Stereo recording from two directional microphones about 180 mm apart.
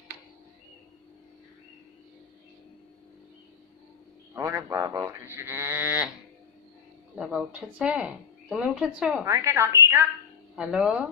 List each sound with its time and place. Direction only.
4.4 s speech: 15° right (ahead or behind)
7.2 s speech: centre (ahead or behind)
9.2 s speech: 15° right (ahead or behind)